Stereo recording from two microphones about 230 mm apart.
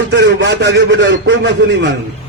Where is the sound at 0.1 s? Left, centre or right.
Right.